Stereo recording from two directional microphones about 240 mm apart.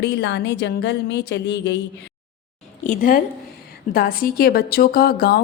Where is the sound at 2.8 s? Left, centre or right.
Left.